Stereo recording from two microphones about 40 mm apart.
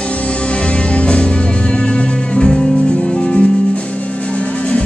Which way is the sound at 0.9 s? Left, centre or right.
Left.